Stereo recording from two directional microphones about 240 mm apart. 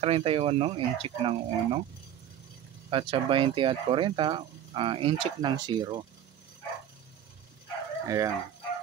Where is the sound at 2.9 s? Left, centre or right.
Right.